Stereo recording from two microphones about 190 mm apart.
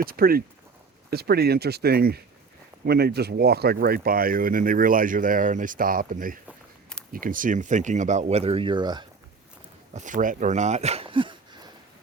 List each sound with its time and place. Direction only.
0.0 s speech: 50° right (ahead or behind); by 9.0 s 25° right (ahead or behind)
9.9 s speech: 40° right (ahead or behind); by 11.7 s 25° right (ahead or behind)